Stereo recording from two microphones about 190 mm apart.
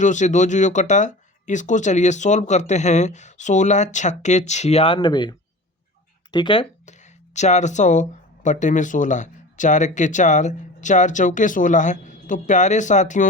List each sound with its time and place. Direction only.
0.0 s speech: 40° left (ahead or behind); by 5.3 s 25° left (ahead or behind)
6.3 s speech: 25° left (ahead or behind)